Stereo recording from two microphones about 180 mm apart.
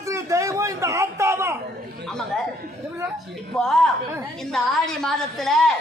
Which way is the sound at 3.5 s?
Centre (ahead or behind).